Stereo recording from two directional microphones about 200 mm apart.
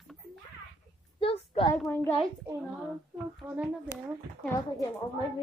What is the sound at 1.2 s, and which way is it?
Speech, 25° left (ahead or behind).